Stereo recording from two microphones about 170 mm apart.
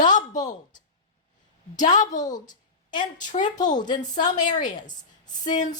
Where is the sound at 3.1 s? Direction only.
45° left (ahead or behind).